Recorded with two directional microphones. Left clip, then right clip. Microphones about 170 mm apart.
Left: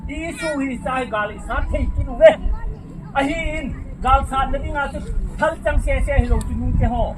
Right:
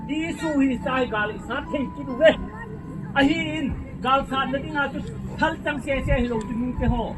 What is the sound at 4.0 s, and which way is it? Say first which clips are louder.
A woman's voice: left 4 dB; 75° left (ahead or behind).